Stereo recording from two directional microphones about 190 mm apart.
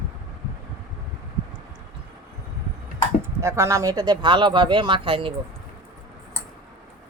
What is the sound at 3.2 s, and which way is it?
Speech, 15° right (ahead or behind).